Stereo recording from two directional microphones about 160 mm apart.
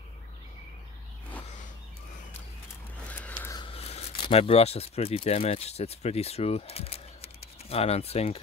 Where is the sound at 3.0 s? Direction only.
10° left (ahead or behind).